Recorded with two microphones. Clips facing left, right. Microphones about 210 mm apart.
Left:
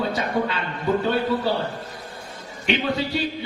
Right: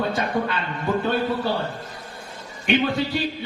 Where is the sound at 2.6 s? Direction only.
50° right (ahead or behind).